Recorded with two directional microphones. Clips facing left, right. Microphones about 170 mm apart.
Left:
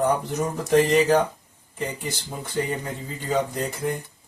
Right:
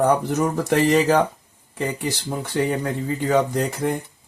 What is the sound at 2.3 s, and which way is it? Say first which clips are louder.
Speech: right 5 dB; 70° right (ahead or behind).